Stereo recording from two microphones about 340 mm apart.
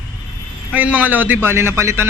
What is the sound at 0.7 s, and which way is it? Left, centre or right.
A man's voice, centre.